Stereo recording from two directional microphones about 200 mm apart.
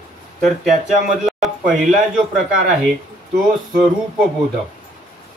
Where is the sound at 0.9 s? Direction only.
Centre (ahead or behind).